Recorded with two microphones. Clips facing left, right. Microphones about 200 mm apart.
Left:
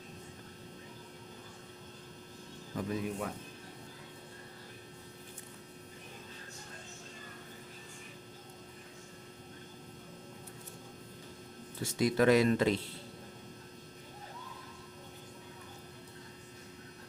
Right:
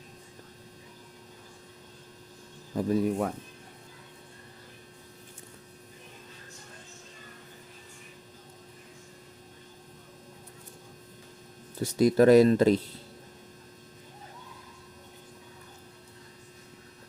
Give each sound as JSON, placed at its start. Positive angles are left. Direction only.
{"t": 2.7, "sound": "speech", "side_deg": -40}
{"t": 11.8, "sound": "speech", "side_deg": -40}